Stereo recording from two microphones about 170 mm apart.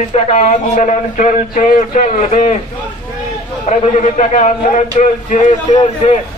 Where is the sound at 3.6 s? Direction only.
45° left (ahead or behind).